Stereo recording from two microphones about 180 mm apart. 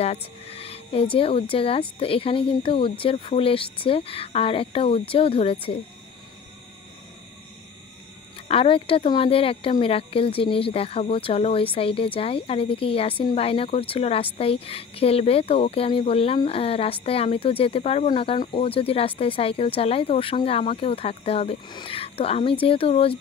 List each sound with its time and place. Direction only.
0.0 s a woman's voice: 35° left (ahead or behind)
8.5 s a woman's voice: 30° left (ahead or behind)